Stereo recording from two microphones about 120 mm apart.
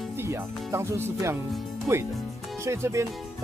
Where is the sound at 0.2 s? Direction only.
20° right (ahead or behind).